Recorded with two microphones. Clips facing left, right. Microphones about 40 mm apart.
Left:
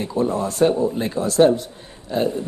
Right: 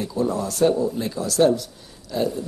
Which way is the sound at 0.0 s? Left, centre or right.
Left.